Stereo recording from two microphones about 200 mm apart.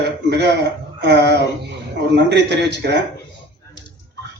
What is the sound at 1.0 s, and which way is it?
Speech, 60° right (ahead or behind).